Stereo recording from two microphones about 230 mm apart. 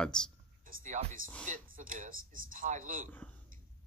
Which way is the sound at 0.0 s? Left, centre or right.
Centre.